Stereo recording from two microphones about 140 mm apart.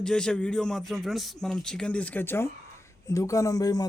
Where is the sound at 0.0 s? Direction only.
5° left (ahead or behind).